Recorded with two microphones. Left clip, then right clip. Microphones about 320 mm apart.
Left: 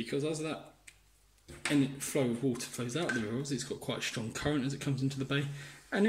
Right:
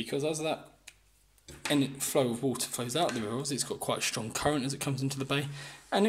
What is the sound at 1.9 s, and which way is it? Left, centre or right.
Speech, centre.